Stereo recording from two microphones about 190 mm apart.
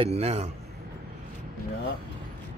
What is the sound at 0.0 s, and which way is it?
Speech, 35° right (ahead or behind).